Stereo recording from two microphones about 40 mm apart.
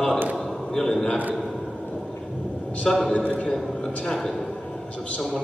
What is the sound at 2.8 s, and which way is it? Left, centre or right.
Speech, centre.